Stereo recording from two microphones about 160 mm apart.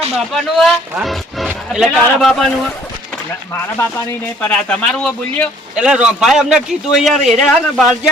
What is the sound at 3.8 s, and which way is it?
Speech, 15° left (ahead or behind).